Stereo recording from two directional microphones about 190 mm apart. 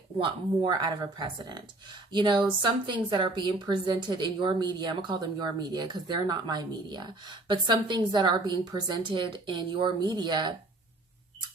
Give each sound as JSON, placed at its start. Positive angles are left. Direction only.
{"t": 0.2, "sound": "a woman's voice", "side_deg": -25}